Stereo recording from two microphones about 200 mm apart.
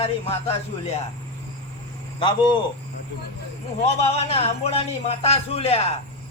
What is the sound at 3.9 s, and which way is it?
A man's voice, 30° left (ahead or behind).